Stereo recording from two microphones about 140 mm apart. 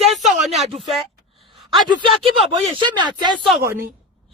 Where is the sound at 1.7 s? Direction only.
40° right (ahead or behind).